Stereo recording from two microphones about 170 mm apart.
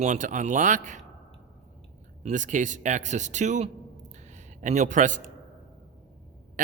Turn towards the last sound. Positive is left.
turn(degrees=-50)  # may be behind; listen again after turning